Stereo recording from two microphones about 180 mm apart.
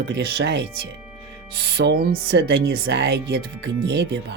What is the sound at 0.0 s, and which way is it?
Speech, 65° right (ahead or behind).